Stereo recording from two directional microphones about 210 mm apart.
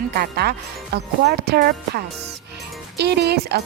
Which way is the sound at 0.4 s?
50° right (ahead or behind).